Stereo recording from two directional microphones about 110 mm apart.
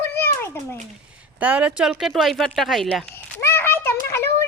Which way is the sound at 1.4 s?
10° right (ahead or behind).